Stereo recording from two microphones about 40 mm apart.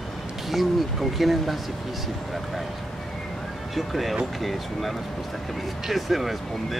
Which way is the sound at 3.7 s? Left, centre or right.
Centre.